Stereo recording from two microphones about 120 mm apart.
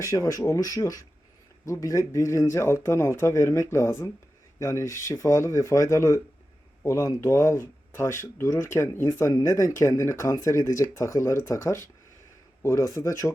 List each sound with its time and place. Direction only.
0.0 s speech: 25° left (ahead or behind)